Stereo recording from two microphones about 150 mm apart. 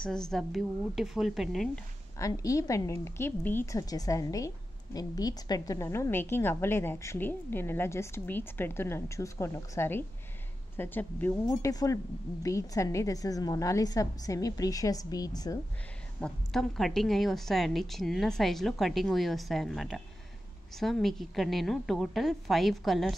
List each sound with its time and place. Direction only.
0.0 s a woman's voice: 5° left (ahead or behind)
2.1 s a woman's voice: 20° left (ahead or behind)
11.4 s a woman's voice: 25° left (ahead or behind)
16.2 s a woman's voice: 5° left (ahead or behind)